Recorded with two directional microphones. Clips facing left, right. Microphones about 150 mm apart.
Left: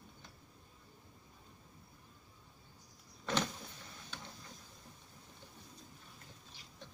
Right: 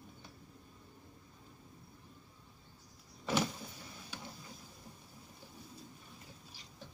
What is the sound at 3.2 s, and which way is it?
Power windows, 10° right (ahead or behind).